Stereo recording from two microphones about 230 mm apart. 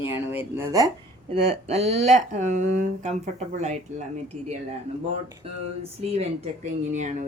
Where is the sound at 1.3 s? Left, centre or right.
Right.